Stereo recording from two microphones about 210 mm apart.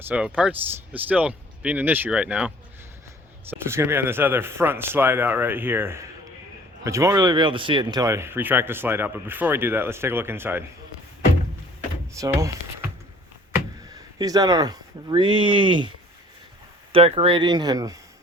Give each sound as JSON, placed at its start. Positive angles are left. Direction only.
{"t": 0.1, "sound": "speech", "side_deg": -5}
{"t": 3.5, "sound": "speech", "side_deg": -10}
{"t": 12.1, "sound": "speech", "side_deg": -15}
{"t": 13.9, "sound": "speech", "side_deg": -15}
{"t": 16.9, "sound": "speech", "side_deg": -25}